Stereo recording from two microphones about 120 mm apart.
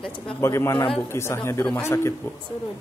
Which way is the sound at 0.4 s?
20° left (ahead or behind).